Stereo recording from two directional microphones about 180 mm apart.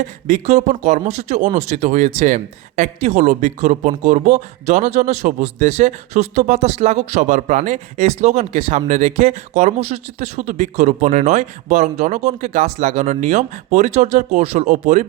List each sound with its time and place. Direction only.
0.0 s speech: 40° right (ahead or behind)